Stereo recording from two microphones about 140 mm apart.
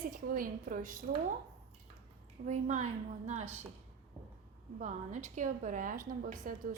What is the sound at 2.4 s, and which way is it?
A woman's voice, 60° right (ahead or behind).